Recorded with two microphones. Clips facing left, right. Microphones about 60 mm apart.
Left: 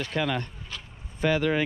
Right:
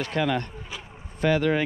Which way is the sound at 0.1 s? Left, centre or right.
Right.